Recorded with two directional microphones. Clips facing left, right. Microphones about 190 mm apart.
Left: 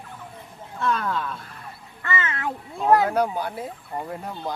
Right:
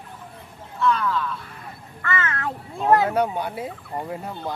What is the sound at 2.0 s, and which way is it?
Speech, 20° left (ahead or behind).